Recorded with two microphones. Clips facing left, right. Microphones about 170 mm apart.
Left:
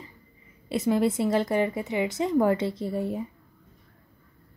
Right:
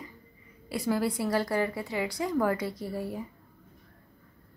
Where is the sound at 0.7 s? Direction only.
20° left (ahead or behind).